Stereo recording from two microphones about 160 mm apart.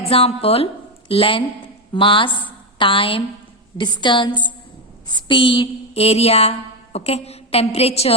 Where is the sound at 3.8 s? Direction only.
30° left (ahead or behind).